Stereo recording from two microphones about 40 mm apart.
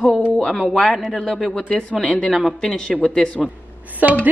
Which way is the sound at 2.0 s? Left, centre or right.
Left.